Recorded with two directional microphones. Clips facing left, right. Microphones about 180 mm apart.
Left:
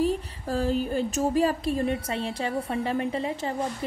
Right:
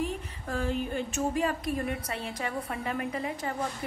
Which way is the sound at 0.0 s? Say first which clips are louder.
Left 7 dB; 35° left (ahead or behind).